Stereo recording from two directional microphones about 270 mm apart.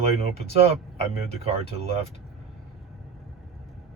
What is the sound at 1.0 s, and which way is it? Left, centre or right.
Speech, right.